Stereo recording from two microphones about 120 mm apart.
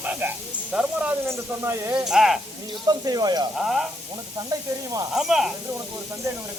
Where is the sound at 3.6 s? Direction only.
5° right (ahead or behind).